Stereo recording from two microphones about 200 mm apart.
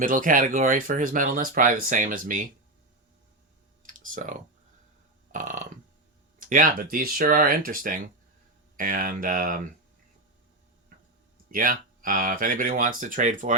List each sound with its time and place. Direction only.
0.0 s speech: 40° right (ahead or behind)
3.8 s clicking: 40° right (ahead or behind)
5.3 s burping: 40° right (ahead or behind)
6.4 s speech: 45° right (ahead or behind)
11.5 s speech: 45° right (ahead or behind)